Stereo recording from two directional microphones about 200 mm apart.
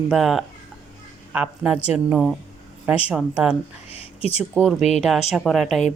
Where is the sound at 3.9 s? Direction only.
30° left (ahead or behind).